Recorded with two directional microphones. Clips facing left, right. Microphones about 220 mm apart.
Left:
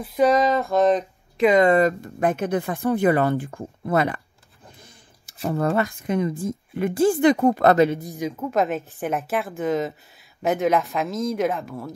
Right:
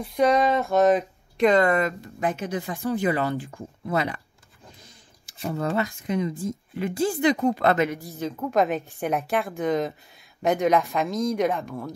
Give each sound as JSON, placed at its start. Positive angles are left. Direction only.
{"t": 0.0, "sound": "a woman's voice", "side_deg": 5}
{"t": 1.7, "sound": "a woman's voice", "side_deg": 35}
{"t": 2.1, "sound": "a woman's voice", "side_deg": 50}
{"t": 5.5, "sound": "a woman's voice", "side_deg": 50}
{"t": 7.7, "sound": "a woman's voice", "side_deg": 35}
{"t": 8.0, "sound": "a woman's voice", "side_deg": 15}